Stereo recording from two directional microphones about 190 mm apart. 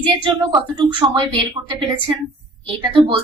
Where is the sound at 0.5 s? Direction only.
25° right (ahead or behind).